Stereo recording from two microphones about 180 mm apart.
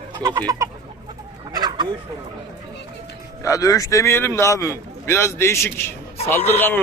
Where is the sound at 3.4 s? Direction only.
20° left (ahead or behind).